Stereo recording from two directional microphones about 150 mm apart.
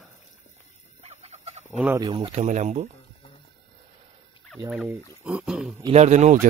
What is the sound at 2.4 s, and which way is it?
Speech, 55° right (ahead or behind).